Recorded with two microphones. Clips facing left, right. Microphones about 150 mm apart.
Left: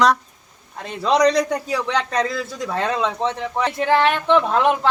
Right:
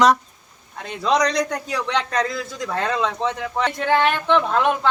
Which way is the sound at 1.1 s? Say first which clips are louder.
Left 3 dB; 30° left (ahead or behind).